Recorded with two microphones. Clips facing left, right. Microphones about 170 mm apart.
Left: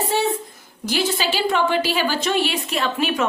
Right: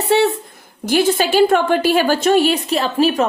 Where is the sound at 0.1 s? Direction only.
70° right (ahead or behind).